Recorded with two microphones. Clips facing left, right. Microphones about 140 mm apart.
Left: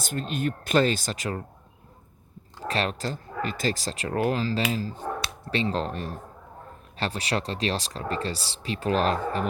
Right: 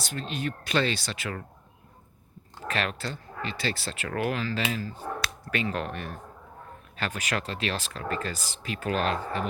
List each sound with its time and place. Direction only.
0.0 s speech: 45° left (ahead or behind)
2.6 s speech: 35° left (ahead or behind)